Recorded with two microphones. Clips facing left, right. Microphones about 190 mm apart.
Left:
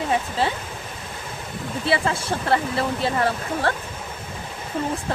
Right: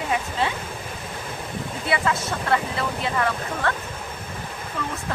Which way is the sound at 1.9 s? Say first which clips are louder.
Left 2 dB; 30° left (ahead or behind).